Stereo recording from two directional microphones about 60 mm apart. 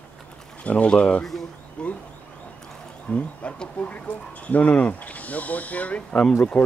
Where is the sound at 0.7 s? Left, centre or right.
Left.